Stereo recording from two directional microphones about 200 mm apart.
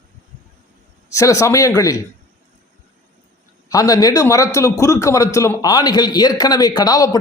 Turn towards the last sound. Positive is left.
turn(degrees=20)  # may be behind; listen again after turning